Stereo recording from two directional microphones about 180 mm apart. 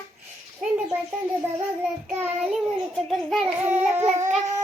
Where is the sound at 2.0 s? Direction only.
10° right (ahead or behind).